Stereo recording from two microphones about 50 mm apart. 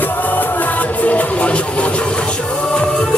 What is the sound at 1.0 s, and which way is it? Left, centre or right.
Music, left.